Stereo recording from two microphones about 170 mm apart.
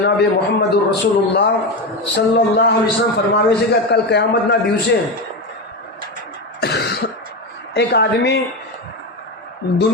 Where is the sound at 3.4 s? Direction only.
75° left (ahead or behind).